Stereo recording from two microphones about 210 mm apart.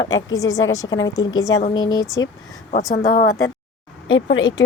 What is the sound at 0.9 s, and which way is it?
Speech, 70° left (ahead or behind).